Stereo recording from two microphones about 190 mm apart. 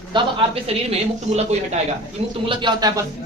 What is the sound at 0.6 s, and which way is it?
A woman's voice, 35° right (ahead or behind).